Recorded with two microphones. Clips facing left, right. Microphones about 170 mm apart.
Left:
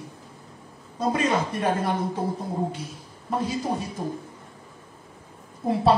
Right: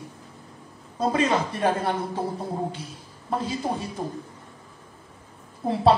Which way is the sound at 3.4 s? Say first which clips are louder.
Left 3 dB; 30° right (ahead or behind).